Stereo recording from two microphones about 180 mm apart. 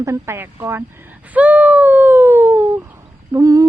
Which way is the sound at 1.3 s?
10° right (ahead or behind).